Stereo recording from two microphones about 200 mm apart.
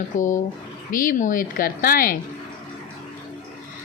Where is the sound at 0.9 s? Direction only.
45° left (ahead or behind).